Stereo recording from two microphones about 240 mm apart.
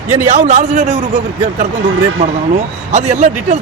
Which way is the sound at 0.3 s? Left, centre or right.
Right.